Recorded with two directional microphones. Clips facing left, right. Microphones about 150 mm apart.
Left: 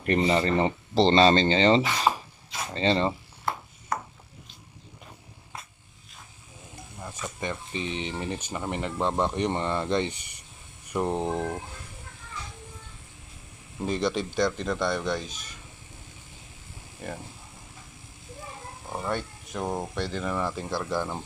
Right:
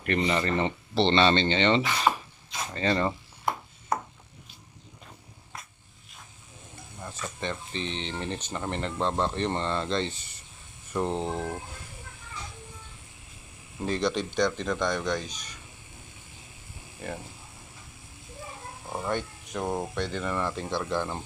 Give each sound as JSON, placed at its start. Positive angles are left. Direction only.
{"t": 0.0, "sound": "speech", "side_deg": 35}
{"t": 2.1, "sound": "a sound", "side_deg": 15}
{"t": 2.7, "sound": "speech", "side_deg": 25}
{"t": 3.5, "sound": "ping", "side_deg": -15}
{"t": 7.0, "sound": "speech", "side_deg": 10}
{"t": 13.8, "sound": "speech", "side_deg": 10}
{"t": 18.9, "sound": "speech", "side_deg": 0}